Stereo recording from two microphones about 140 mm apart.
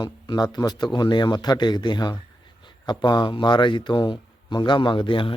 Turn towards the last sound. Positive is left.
turn(degrees=35)  # may be behind; listen again after turning